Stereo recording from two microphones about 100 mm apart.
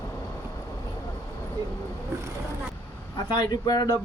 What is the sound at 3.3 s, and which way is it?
Speech, 45° left (ahead or behind).